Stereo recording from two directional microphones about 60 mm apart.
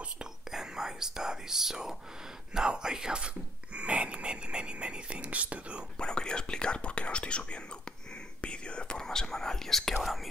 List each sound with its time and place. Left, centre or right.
0.0 s whispering: centre
2.5 s speech: centre
5.9 s speech: centre
8.1 s whispering: centre